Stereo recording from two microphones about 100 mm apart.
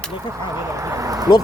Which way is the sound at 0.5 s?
30° right (ahead or behind).